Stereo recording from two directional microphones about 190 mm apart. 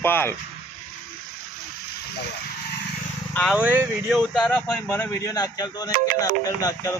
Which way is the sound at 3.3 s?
5° left (ahead or behind).